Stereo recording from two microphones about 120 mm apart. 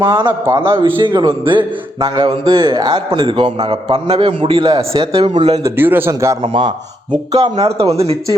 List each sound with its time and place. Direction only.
0.0 s a man's voice: 40° right (ahead or behind)
0.3 s a man's voice: 25° right (ahead or behind)
0.7 s speech: 45° right (ahead or behind)
5.3 s speech: 70° right (ahead or behind)
5.6 s a man's voice: 15° right (ahead or behind)
6.4 s speech: 45° right (ahead or behind)
7.5 s speech: 60° right (ahead or behind)